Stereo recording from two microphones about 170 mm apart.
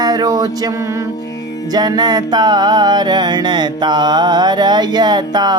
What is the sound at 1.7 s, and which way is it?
Music, 25° right (ahead or behind).